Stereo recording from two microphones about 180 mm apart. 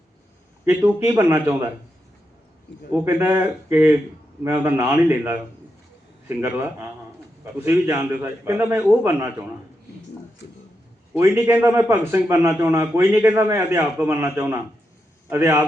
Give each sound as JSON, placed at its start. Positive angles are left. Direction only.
{"t": 0.6, "sound": "a man's voice", "side_deg": -10}
{"t": 2.9, "sound": "a man's voice", "side_deg": -10}
{"t": 11.1, "sound": "a man's voice", "side_deg": -15}